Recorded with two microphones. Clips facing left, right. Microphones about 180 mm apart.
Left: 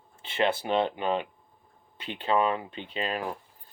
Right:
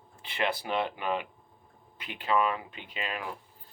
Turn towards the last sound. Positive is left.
turn(degrees=35)  # may be behind; listen again after turning